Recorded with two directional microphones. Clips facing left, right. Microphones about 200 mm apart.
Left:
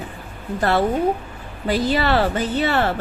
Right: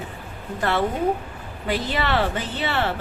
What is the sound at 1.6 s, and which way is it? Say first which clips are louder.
A woman's voice: left 5 dB; 35° left (ahead or behind).